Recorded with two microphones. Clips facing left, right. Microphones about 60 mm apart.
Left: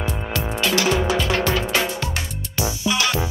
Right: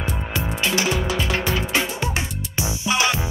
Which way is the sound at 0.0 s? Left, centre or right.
Right.